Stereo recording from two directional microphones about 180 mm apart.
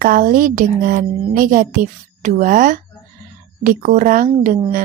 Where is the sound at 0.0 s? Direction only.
50° right (ahead or behind).